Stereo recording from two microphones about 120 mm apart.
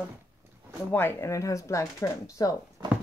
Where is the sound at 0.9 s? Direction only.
20° left (ahead or behind).